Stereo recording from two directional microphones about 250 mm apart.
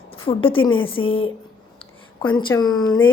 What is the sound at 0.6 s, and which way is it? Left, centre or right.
Speech, left.